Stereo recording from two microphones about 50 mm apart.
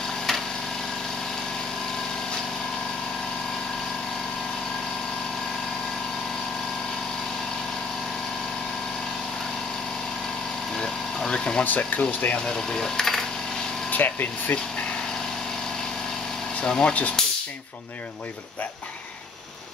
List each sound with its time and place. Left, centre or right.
0.3 s a sound: centre
10.8 s vehicle: centre
11.6 s speech: left
12.4 s speech: centre
13.9 s speech: left
16.6 s speech: centre
17.2 s a sound: centre